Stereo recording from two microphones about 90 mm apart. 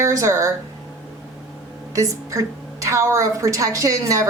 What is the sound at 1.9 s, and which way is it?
A woman's voice, 35° right (ahead or behind).